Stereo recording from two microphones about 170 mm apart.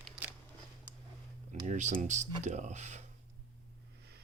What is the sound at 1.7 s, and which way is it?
Speech, 45° right (ahead or behind).